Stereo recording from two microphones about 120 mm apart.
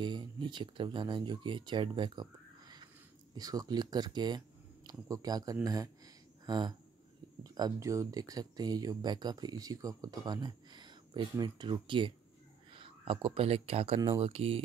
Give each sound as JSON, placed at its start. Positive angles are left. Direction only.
{"t": 0.0, "sound": "speech", "side_deg": -40}